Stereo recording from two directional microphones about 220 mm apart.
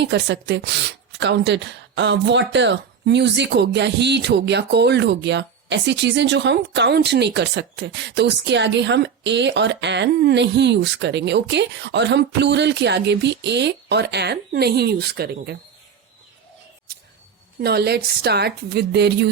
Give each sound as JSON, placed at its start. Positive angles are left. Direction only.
{"t": 0.0, "sound": "speech", "side_deg": -55}
{"t": 17.6, "sound": "speech", "side_deg": -45}